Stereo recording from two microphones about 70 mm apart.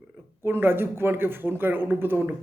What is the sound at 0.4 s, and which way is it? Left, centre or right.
A man's voice, right.